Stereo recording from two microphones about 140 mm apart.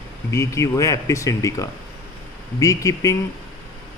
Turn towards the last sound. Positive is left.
turn(degrees=25)  # may be behind; listen again after turning